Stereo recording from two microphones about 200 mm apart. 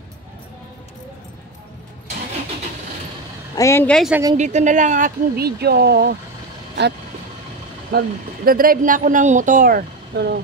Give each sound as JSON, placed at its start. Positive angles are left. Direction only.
{"t": 3.5, "sound": "speech", "side_deg": 15}
{"t": 4.4, "sound": "speech", "side_deg": -35}
{"t": 7.9, "sound": "speech", "side_deg": -55}